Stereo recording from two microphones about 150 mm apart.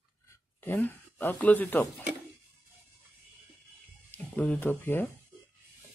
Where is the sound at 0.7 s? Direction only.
10° left (ahead or behind).